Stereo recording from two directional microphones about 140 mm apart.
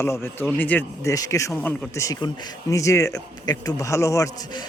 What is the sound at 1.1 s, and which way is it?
A man's voice, 25° left (ahead or behind).